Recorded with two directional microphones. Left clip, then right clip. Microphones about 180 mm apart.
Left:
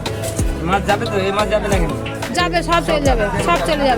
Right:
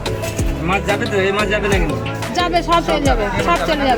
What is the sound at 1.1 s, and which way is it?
Speech, 15° right (ahead or behind).